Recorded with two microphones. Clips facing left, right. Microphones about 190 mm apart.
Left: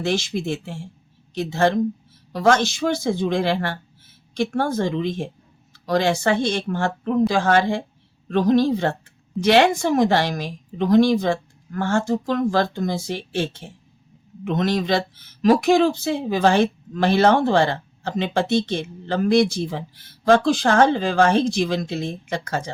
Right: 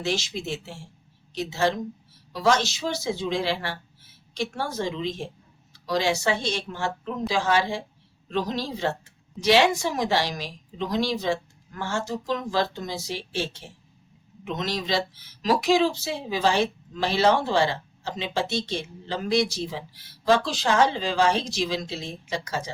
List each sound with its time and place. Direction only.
0.0 s speech: 55° left (ahead or behind)